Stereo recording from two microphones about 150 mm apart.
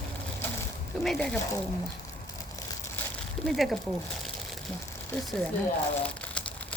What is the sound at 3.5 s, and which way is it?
Speech, centre (ahead or behind).